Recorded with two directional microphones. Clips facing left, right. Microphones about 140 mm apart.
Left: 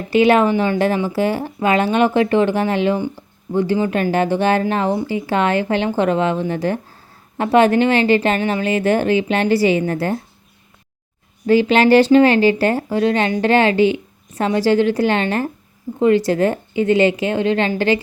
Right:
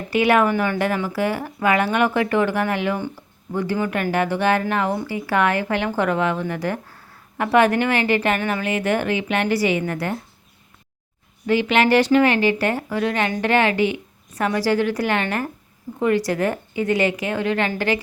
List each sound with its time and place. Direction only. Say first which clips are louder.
0.1 s speech: left 4 dB; 25° left (ahead or behind)
11.4 s speech: left 5 dB; 35° left (ahead or behind)